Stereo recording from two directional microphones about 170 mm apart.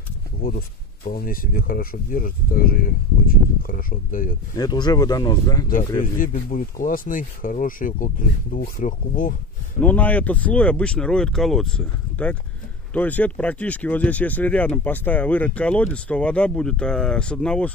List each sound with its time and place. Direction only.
0.4 s speech: 60° left (ahead or behind)
4.6 s speech: 25° left (ahead or behind)
5.9 s speech: 50° left (ahead or behind)
9.8 s speech: 10° left (ahead or behind)